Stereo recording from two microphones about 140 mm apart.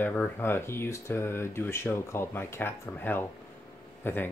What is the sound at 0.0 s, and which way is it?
Speech, 15° left (ahead or behind).